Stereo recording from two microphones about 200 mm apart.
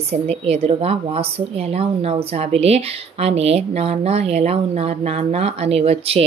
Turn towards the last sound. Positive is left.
turn(degrees=-30)  # may be behind; listen again after turning